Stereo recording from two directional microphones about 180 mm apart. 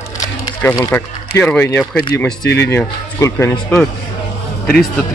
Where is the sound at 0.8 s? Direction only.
10° left (ahead or behind).